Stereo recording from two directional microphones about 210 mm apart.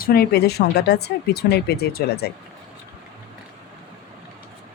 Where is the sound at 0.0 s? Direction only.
50° left (ahead or behind).